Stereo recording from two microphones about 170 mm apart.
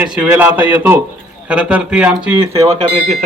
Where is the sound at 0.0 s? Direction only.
10° right (ahead or behind).